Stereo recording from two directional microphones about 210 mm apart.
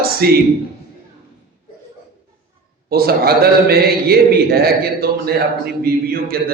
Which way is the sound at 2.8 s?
45° right (ahead or behind).